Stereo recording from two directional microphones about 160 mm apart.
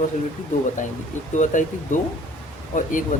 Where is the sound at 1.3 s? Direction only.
50° left (ahead or behind).